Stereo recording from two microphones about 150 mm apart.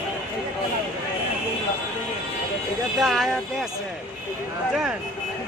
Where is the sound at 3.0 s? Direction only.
Centre (ahead or behind).